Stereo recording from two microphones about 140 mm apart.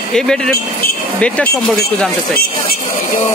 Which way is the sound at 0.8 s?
90° left.